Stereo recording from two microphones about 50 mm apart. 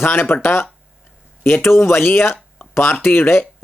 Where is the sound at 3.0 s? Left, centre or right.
Left.